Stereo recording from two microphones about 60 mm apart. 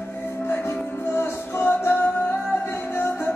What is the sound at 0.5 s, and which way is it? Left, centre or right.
Music, left.